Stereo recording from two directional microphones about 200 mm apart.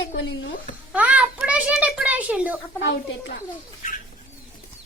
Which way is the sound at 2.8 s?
65° left (ahead or behind).